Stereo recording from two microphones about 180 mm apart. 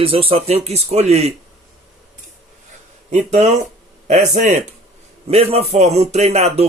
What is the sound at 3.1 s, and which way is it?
A man's voice, 40° right (ahead or behind).